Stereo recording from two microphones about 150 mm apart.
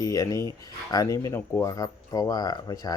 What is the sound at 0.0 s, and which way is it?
Speech, 20° left (ahead or behind).